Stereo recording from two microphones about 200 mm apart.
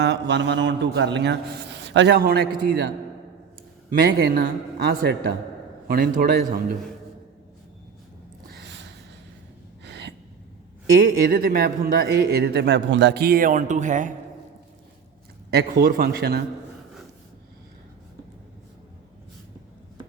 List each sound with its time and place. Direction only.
0.0 s a man's voice: 60° right (ahead or behind)
4.0 s a man's voice: 50° right (ahead or behind)
8.4 s a sound: 60° right (ahead or behind)
9.8 s gasp: 60° right (ahead or behind)
10.9 s a man's voice: 45° right (ahead or behind)
15.4 s a man's voice: 50° right (ahead or behind)